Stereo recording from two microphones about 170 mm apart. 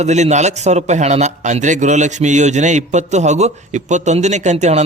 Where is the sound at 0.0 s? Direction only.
40° right (ahead or behind).